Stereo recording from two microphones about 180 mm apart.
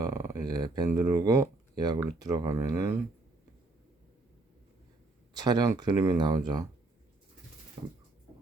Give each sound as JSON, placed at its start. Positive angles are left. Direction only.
{"t": 0.0, "sound": "speech", "side_deg": -20}
{"t": 5.3, "sound": "speech", "side_deg": -20}